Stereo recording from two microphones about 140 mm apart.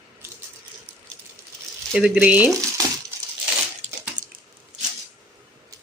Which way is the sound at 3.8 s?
55° right (ahead or behind).